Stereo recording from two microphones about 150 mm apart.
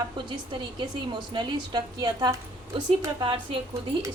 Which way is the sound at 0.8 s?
30° right (ahead or behind).